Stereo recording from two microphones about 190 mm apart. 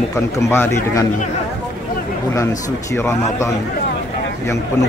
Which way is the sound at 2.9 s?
15° left (ahead or behind).